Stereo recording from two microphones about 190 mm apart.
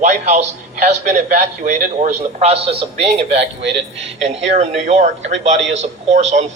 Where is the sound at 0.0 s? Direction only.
40° right (ahead or behind).